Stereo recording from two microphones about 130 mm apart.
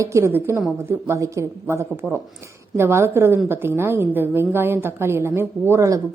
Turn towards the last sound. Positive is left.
turn(degrees=-25)  # may be behind; listen again after turning